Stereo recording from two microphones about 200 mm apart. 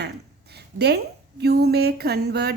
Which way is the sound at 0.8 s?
55° right (ahead or behind).